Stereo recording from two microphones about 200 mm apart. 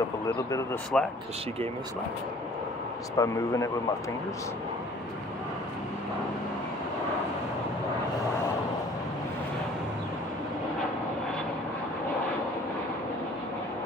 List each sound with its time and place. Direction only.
0.9 s speech: 5° left (ahead or behind)
3.2 s speech: 15° left (ahead or behind)